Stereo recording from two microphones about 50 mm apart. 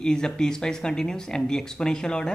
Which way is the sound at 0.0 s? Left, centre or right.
Centre.